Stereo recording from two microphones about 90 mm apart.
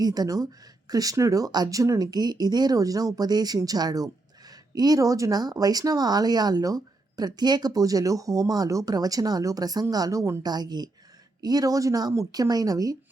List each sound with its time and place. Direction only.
0.0 s speech: 45° right (ahead or behind)